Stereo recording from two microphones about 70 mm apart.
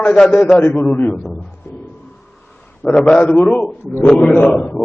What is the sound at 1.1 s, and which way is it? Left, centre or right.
Speech, centre.